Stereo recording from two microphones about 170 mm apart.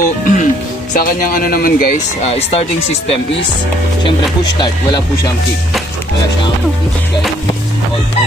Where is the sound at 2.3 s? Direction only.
35° left (ahead or behind).